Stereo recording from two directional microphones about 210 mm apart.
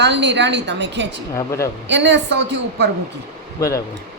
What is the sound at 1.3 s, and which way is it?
Speech, 15° left (ahead or behind).